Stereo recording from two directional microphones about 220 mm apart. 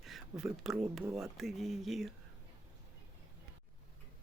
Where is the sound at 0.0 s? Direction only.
Centre (ahead or behind).